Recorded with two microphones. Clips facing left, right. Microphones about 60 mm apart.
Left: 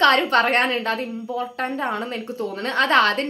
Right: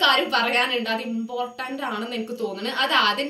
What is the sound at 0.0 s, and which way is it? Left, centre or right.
A woman's voice, left.